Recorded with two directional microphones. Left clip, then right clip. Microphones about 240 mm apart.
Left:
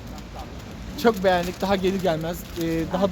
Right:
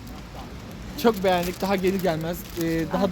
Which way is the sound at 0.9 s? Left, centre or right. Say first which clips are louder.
Left 1 dB; centre.